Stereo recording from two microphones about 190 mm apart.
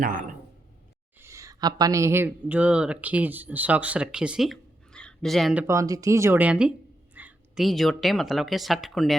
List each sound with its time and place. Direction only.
0.0 s speech: 45° right (ahead or behind)
1.2 s speech: 15° right (ahead or behind)
5.6 s speech: 15° right (ahead or behind); by 9.1 s centre (ahead or behind)